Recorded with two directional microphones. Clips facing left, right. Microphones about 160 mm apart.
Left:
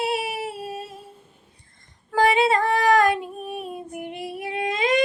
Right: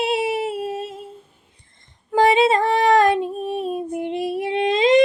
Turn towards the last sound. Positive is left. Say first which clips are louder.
# right 7 dB
turn(degrees=-25)  # may be behind; listen again after turning